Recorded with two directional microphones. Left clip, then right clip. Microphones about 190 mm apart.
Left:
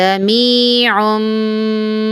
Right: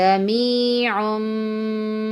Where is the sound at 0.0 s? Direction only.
30° left (ahead or behind).